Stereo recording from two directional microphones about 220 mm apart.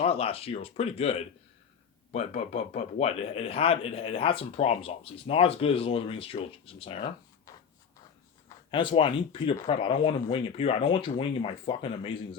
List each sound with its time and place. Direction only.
0.0 s speech: 25° left (ahead or behind)
8.4 s speech: 20° left (ahead or behind)